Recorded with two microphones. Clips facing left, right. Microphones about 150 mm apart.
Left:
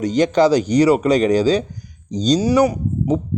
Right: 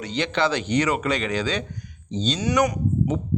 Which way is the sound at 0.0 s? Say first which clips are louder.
Left 9 dB; 40° left (ahead or behind).